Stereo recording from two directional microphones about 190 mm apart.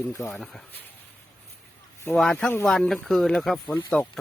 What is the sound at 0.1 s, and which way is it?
Speech, 5° left (ahead or behind).